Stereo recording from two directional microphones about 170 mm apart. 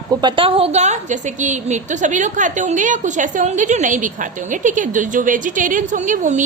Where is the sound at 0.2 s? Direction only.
30° right (ahead or behind).